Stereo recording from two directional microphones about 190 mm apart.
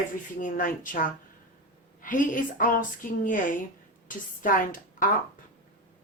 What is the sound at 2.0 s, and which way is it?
A woman's voice, 45° left (ahead or behind).